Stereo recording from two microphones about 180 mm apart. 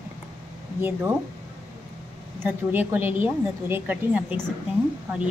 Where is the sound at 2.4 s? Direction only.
10° right (ahead or behind).